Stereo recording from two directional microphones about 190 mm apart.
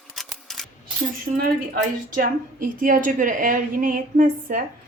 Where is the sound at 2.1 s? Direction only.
45° right (ahead or behind).